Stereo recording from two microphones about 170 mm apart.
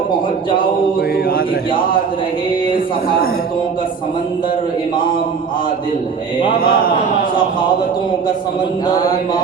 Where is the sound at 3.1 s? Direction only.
60° left (ahead or behind).